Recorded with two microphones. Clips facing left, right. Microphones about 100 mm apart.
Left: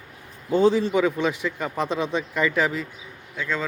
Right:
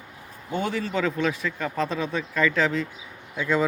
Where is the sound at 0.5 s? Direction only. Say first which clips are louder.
Left 9 dB; 25° left (ahead or behind).